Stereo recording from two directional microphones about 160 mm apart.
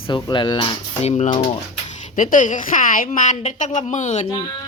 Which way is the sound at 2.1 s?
55° left (ahead or behind).